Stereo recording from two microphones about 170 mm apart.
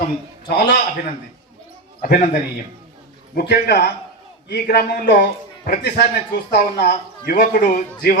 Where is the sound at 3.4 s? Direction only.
60° left (ahead or behind).